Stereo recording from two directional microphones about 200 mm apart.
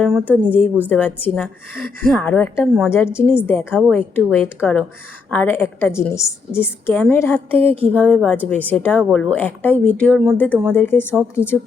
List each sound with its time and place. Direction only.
0.0 s a woman's voice: 5° left (ahead or behind)
3.8 s a woman's voice: centre (ahead or behind)
7.6 s speech: 30° right (ahead or behind)
7.9 s a woman's voice: 5° left (ahead or behind)